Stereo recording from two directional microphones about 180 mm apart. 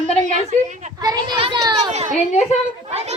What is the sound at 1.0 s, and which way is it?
Speech, 25° right (ahead or behind).